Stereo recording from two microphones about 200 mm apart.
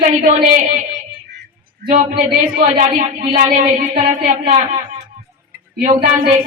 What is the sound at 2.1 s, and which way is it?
Speech, 45° right (ahead or behind).